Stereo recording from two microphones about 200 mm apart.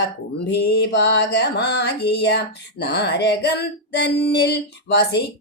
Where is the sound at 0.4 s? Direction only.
55° left (ahead or behind).